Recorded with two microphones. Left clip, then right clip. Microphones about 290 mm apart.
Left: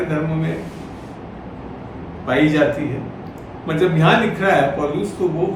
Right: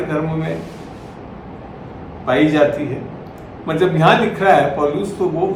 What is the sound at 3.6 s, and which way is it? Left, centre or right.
A man's voice, centre.